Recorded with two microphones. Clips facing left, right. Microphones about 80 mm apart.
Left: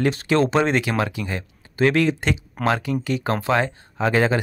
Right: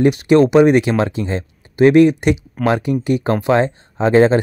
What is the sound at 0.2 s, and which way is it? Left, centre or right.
Speech, centre.